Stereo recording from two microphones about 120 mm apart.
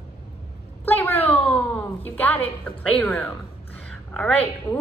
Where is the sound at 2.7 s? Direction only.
10° left (ahead or behind).